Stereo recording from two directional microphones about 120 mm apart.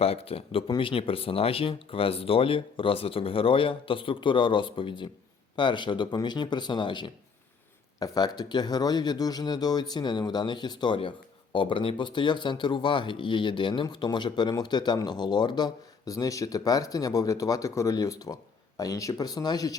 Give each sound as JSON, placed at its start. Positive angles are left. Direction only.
{"t": 0.0, "sound": "a man's voice", "side_deg": 55}